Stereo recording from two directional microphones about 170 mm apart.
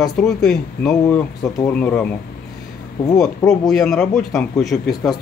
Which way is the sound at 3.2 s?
Centre (ahead or behind).